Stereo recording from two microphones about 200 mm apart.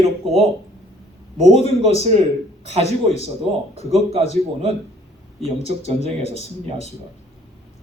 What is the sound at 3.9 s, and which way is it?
Speech, 30° right (ahead or behind).